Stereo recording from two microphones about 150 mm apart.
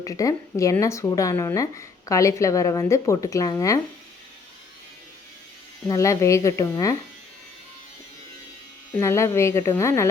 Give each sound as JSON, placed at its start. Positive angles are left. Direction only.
{"t": 0.0, "sound": "speech", "side_deg": 20}
{"t": 5.9, "sound": "speech", "side_deg": 20}
{"t": 8.9, "sound": "speech", "side_deg": 20}